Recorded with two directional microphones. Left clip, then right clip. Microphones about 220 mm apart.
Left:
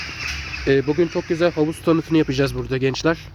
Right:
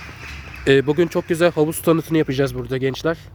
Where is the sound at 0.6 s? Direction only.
30° right (ahead or behind).